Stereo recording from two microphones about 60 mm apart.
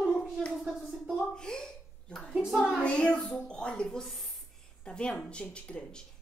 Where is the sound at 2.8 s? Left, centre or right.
Centre.